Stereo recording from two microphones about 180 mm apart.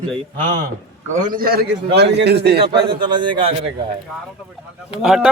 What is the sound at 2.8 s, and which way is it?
Speech, 25° right (ahead or behind).